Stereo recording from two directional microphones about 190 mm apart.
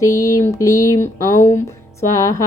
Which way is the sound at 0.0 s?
15° left (ahead or behind).